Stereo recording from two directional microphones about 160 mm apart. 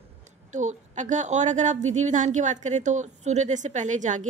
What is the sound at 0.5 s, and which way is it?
A woman's voice, 50° right (ahead or behind).